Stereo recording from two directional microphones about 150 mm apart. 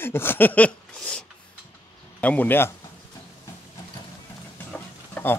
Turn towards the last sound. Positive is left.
turn(degrees=10)  # may be behind; listen again after turning